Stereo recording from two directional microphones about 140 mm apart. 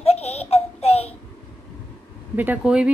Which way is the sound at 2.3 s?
10° right (ahead or behind).